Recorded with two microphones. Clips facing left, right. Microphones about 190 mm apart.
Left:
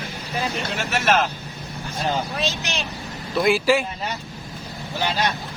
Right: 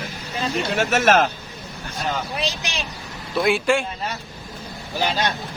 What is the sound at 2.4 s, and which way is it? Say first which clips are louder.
Speech: left 1 dB; 10° right (ahead or behind).